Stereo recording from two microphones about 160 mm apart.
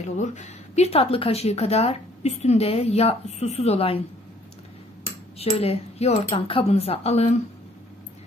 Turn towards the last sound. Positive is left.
turn(degrees=40)  # may be behind; listen again after turning